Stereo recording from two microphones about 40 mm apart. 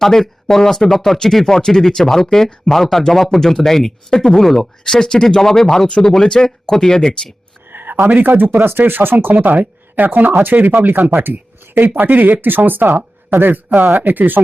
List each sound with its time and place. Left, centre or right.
0.0 s speech: centre
7.7 s a sound: right
8.1 s speech: right
8.4 s speech: right
9.3 s speech: right